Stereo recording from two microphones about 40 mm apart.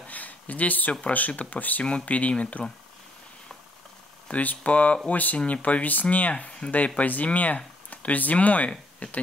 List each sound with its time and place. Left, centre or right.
0.1 s a sound: left
1.1 s speech: left
1.9 s speech: left
4.3 s speech: left